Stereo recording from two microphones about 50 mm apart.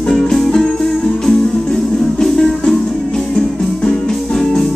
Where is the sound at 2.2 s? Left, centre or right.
Centre.